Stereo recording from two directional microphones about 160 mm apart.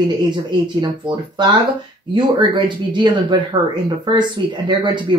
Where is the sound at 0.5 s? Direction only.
30° right (ahead or behind).